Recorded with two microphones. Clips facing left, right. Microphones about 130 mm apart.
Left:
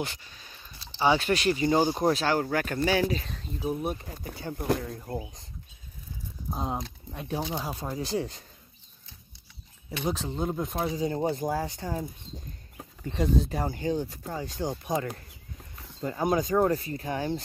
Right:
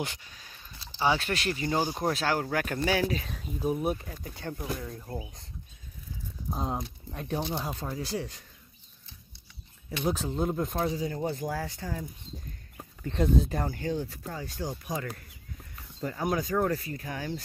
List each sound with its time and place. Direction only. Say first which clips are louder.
0.0 s speech: left 1 dB; 10° right (ahead or behind)
4.6 s speech: left 10 dB; 70° left (ahead or behind)
7.2 s speech: even; centre (ahead or behind)
7.9 s speech: left 3 dB; 25° left (ahead or behind)
10.0 s speech: right 1 dB; centre (ahead or behind)
11.0 s speech: left 4 dB; 30° left (ahead or behind)
13.1 s speech: even; centre (ahead or behind)
13.7 s speech: left 3 dB; 20° left (ahead or behind)